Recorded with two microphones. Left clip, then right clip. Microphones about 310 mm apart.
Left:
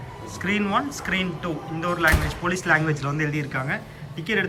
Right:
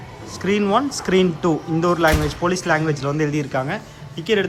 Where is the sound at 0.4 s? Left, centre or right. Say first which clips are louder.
Right 5 dB; centre.